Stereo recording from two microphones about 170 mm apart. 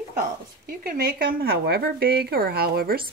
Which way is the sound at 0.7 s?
65° right (ahead or behind).